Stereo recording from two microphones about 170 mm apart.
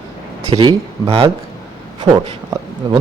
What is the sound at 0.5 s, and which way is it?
Speech, 25° right (ahead or behind).